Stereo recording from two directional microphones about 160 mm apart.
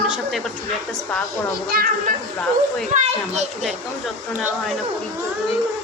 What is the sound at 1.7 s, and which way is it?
Speech, 65° right (ahead or behind).